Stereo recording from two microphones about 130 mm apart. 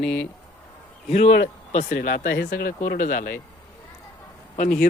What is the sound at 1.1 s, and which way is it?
Speech, 60° left (ahead or behind).